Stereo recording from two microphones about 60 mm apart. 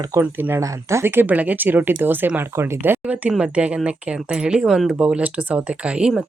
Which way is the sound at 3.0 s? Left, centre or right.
Right.